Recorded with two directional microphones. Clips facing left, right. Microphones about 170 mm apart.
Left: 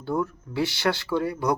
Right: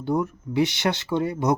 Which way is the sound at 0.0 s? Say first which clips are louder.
Right 2 dB; 20° right (ahead or behind).